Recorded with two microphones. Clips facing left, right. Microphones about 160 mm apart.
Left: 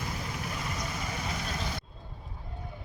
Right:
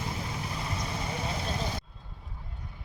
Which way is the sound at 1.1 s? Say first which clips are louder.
Right 2 dB; 30° right (ahead or behind).